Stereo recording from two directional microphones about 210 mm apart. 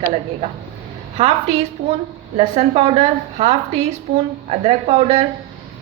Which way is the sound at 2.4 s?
25° right (ahead or behind).